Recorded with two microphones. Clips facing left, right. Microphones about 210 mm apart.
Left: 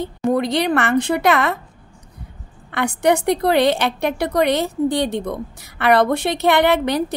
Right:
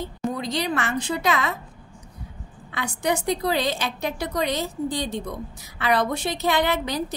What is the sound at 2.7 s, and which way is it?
A woman's voice, 60° left (ahead or behind).